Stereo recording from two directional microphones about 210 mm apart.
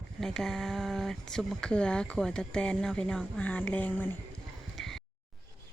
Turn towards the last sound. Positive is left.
turn(degrees=0)  # may be behind; listen again after turning